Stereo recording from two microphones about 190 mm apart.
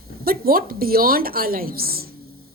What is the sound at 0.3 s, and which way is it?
A woman's voice, 50° right (ahead or behind).